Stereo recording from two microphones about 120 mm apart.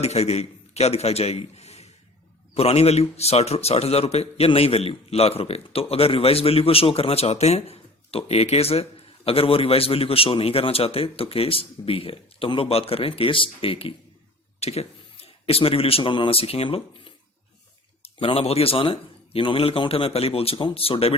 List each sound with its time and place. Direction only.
0.0 s a man's voice: 60° left (ahead or behind)